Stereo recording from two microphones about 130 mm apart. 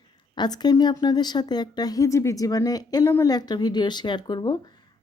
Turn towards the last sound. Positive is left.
turn(degrees=35)  # may be behind; listen again after turning